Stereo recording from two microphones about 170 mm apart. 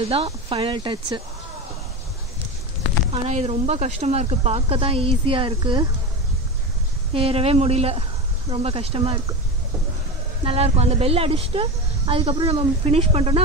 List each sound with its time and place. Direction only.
0.1 s speech: 35° right (ahead or behind)
3.1 s speech: 40° right (ahead or behind)
7.2 s speech: 35° right (ahead or behind)
10.4 s speech: 35° right (ahead or behind)